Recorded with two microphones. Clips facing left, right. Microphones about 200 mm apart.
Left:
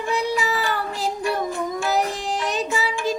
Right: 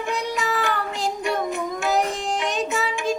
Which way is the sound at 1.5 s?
20° right (ahead or behind).